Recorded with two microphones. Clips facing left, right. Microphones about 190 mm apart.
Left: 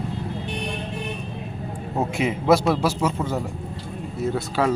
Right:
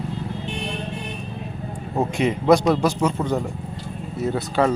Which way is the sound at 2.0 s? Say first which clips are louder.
Right 2 dB; 5° left (ahead or behind).